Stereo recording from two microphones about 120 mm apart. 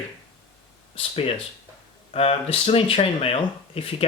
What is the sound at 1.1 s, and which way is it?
Speech, 55° left (ahead or behind).